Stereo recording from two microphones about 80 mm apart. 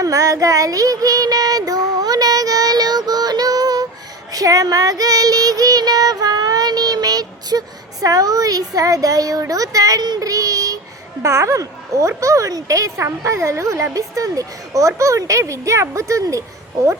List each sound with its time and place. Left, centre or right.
0.0 s child singing: right
8.0 s speech: right